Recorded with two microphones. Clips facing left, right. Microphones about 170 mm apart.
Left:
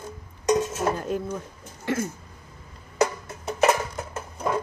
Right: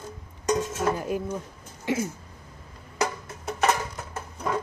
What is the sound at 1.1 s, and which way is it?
Speech, 10° right (ahead or behind).